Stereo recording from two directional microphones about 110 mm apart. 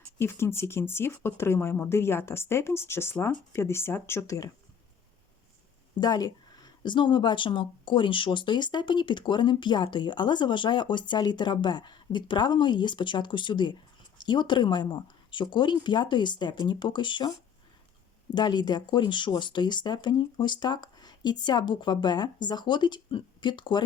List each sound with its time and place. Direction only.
0.2 s speech: 25° left (ahead or behind)
6.0 s speech: 35° left (ahead or behind)
18.3 s speech: 40° left (ahead or behind)